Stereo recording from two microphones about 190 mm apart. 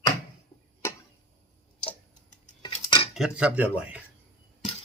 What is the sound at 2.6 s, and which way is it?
Cutlery, 25° left (ahead or behind).